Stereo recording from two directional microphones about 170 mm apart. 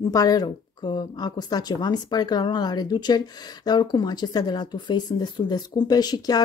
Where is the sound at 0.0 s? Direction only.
20° left (ahead or behind).